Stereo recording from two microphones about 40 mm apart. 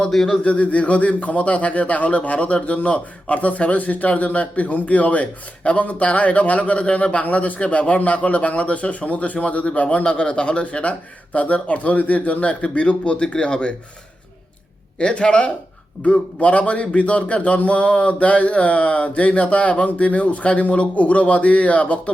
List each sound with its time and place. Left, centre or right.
0.1 s speech: centre
0.4 s a man's voice: left
14.9 s a man's voice: left